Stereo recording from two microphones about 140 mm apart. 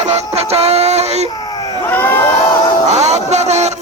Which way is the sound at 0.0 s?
45° right (ahead or behind).